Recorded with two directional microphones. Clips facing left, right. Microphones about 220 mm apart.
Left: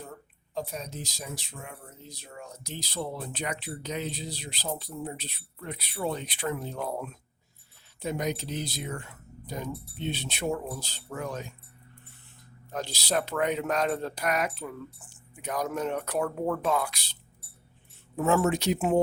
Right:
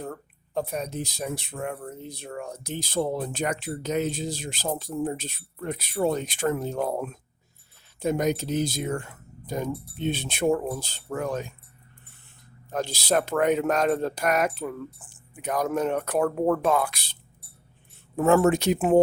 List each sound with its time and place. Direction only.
0.5 s speech: 60° right (ahead or behind)
12.7 s speech: 50° right (ahead or behind)
18.2 s speech: 55° right (ahead or behind)